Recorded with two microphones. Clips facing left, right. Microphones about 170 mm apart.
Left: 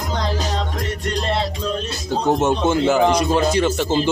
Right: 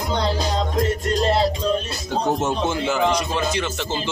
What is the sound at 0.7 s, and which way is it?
Music, 35° right (ahead or behind).